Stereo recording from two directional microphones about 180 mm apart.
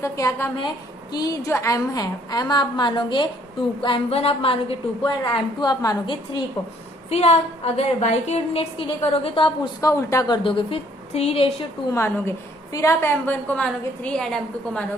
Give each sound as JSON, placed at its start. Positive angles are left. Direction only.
{"t": 0.0, "sound": "a woman's voice", "side_deg": 15}
{"t": 7.1, "sound": "a woman's voice", "side_deg": 35}
{"t": 11.9, "sound": "a woman's voice", "side_deg": 15}